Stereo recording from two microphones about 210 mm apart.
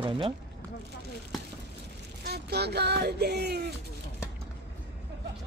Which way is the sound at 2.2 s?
50° right (ahead or behind).